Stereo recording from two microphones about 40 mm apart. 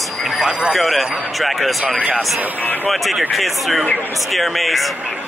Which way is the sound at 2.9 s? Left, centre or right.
Centre.